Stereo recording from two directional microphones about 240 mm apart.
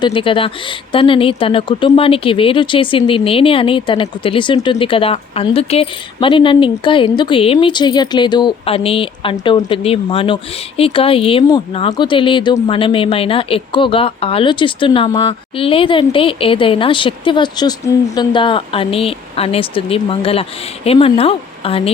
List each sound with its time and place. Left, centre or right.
0.0 s speech: left